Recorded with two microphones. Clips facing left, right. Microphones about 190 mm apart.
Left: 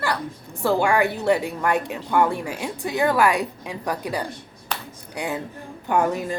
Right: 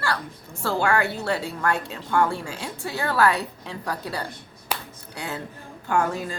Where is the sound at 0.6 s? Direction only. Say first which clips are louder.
Left 4 dB; 15° left (ahead or behind).